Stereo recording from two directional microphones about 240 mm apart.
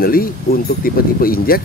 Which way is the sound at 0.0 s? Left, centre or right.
Left.